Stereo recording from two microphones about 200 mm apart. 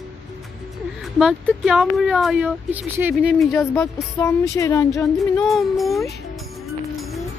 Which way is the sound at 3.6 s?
10° left (ahead or behind).